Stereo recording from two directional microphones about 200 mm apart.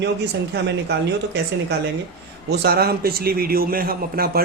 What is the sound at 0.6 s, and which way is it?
A man's voice, 55° right (ahead or behind).